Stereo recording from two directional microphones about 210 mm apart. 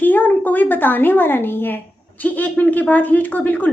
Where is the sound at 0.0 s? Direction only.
10° left (ahead or behind).